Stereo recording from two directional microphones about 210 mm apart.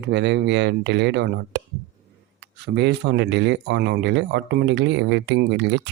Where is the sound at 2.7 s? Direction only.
55° right (ahead or behind).